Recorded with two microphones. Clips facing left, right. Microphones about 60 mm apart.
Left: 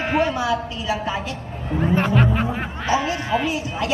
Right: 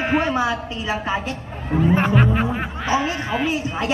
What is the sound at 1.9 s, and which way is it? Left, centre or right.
Speech, centre.